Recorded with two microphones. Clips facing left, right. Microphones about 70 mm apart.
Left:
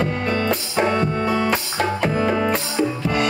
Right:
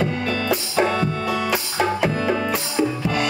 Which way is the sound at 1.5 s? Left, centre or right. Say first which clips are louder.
Even; centre.